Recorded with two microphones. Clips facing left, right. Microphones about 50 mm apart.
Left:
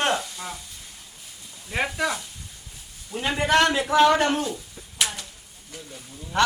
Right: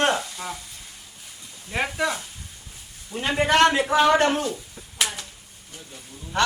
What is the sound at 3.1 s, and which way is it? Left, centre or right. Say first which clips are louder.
Speech: even; right.